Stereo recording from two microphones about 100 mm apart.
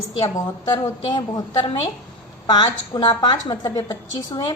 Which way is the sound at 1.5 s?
55° left (ahead or behind).